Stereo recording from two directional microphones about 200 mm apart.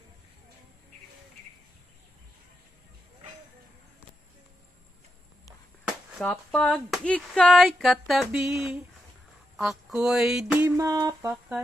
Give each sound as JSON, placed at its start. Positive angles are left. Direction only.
{"t": 5.9, "sound": "chop", "side_deg": 0}
{"t": 6.3, "sound": "speech", "side_deg": 5}
{"t": 10.8, "sound": "a sound", "side_deg": -15}